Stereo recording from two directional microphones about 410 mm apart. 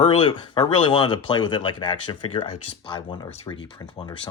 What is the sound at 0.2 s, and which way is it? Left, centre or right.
Speech, centre.